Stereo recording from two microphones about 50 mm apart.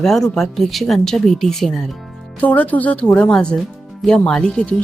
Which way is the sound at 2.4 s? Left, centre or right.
Left.